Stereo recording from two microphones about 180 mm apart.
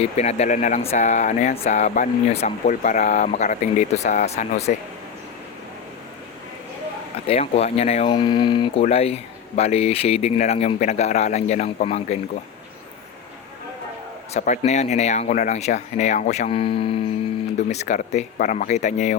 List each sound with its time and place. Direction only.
0.0 s speech: 35° left (ahead or behind)
7.3 s speech: 35° left (ahead or behind)
14.3 s speech: 40° left (ahead or behind)